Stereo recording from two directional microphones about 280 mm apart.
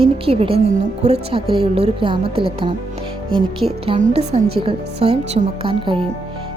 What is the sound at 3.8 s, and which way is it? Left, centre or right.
A woman's voice, right.